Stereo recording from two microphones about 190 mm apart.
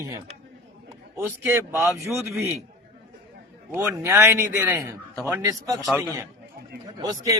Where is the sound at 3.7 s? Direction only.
10° right (ahead or behind).